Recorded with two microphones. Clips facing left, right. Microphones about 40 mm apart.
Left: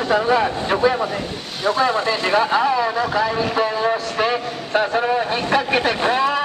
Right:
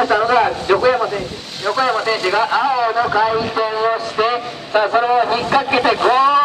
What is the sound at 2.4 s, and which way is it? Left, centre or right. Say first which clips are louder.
Speech: even; centre.